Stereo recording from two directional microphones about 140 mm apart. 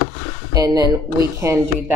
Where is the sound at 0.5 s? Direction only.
25° right (ahead or behind).